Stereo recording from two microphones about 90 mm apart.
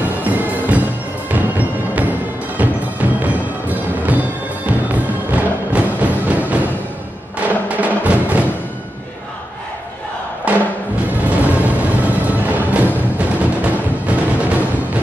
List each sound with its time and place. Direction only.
0.2 s music: 15° right (ahead or behind)
10.5 s music: 15° right (ahead or behind)